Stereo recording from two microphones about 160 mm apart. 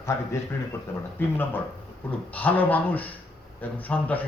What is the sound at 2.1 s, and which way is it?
Speech, 10° left (ahead or behind).